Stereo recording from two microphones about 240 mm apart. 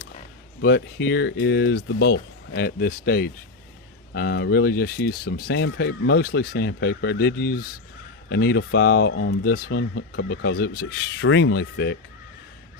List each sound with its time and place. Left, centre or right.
0.6 s speech: left